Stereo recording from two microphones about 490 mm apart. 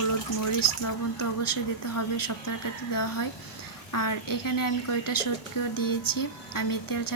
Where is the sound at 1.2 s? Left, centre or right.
Left.